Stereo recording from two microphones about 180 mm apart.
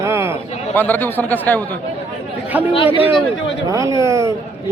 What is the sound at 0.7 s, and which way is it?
Speech, 10° left (ahead or behind).